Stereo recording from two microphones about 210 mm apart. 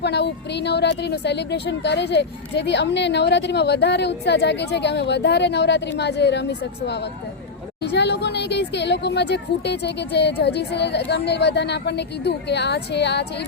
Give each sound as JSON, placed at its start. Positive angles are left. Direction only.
{"t": 0.0, "sound": "speech", "side_deg": 50}